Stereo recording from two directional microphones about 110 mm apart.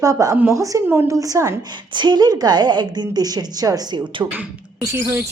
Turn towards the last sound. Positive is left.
turn(degrees=-25)  # may be behind; listen again after turning